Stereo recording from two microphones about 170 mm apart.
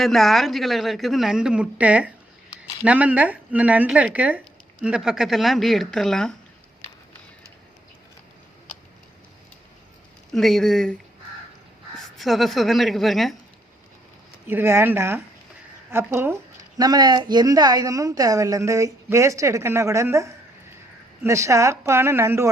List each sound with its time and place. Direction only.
0.0 s speech: centre (ahead or behind)
10.3 s speech: centre (ahead or behind)
12.1 s speech: centre (ahead or behind)
14.4 s speech: 15° right (ahead or behind)